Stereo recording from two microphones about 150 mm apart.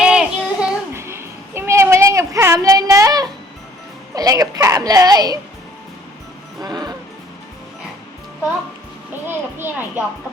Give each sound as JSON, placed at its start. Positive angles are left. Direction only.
{"t": 0.0, "sound": "child singing", "side_deg": -5}
{"t": 0.9, "sound": "a sound", "side_deg": -15}
{"t": 4.1, "sound": "a woman's voice", "side_deg": -25}
{"t": 6.6, "sound": "music", "side_deg": -25}
{"t": 9.2, "sound": "speech", "side_deg": -15}